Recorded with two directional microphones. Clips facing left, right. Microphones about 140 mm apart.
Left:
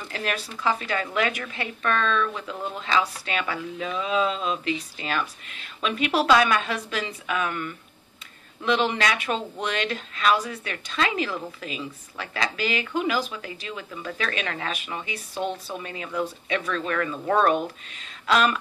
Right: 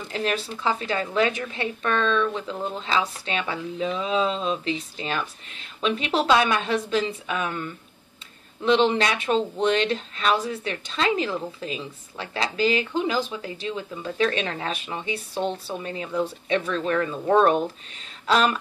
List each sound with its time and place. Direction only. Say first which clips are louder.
0.1 s a woman's voice: right 4 dB; 25° right (ahead or behind)